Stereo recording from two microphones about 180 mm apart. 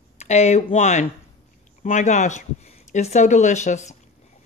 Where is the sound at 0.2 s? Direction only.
35° left (ahead or behind).